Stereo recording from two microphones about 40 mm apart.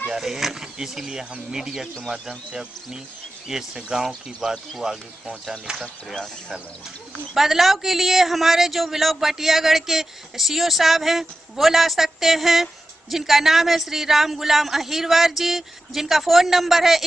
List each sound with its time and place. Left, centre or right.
0.2 s speech: centre; by 5.8 s right
7.3 s a man's voice: centre